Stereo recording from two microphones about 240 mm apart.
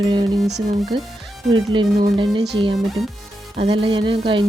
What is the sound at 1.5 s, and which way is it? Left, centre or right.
Speech, centre.